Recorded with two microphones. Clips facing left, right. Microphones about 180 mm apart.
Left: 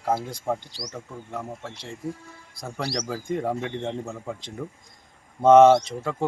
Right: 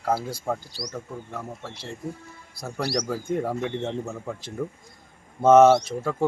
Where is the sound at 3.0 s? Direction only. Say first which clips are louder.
Right 1 dB; 5° left (ahead or behind).